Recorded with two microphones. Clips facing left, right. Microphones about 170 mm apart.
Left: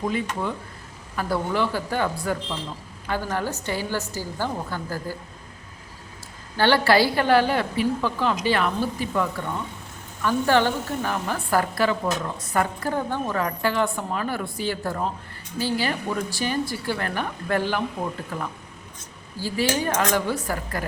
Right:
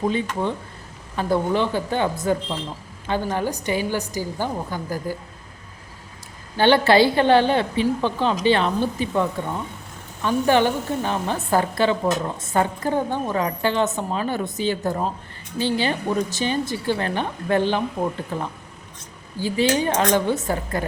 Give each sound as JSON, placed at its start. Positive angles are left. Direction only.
{"t": 0.1, "sound": "a woman's voice", "side_deg": -25}
{"t": 6.6, "sound": "a woman's voice", "side_deg": -20}